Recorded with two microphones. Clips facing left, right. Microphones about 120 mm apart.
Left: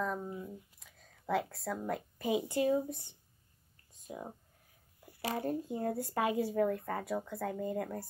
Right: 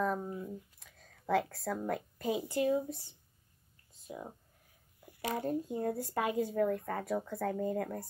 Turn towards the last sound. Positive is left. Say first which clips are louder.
# right 3 dB
turn(degrees=0)  # may be behind; listen again after turning